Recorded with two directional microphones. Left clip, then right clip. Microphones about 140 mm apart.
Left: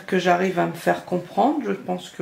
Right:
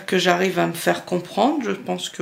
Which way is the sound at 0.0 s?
25° right (ahead or behind).